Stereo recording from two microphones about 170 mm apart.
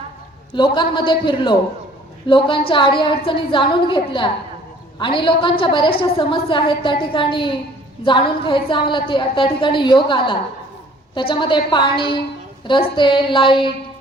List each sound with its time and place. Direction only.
0.5 s a woman's voice: 30° left (ahead or behind)